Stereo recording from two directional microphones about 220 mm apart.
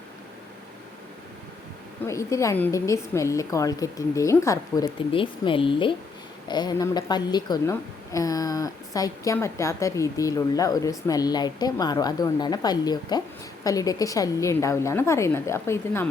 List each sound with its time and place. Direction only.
2.0 s a woman's voice: 15° left (ahead or behind)